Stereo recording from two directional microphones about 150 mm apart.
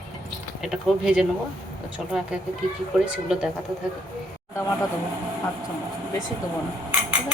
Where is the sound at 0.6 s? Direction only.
5° right (ahead or behind).